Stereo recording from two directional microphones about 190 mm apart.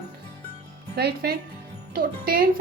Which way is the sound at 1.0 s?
55° right (ahead or behind).